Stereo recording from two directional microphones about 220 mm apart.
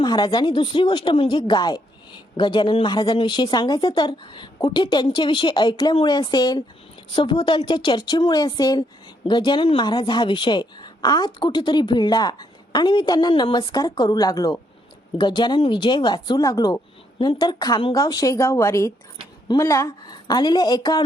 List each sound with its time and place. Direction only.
0.0 s speech: 20° left (ahead or behind)